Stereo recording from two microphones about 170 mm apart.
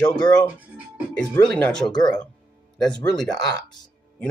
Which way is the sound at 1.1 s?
5° left (ahead or behind).